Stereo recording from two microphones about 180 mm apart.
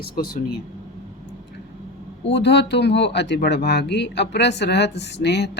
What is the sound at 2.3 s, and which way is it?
Speech, 70° left (ahead or behind).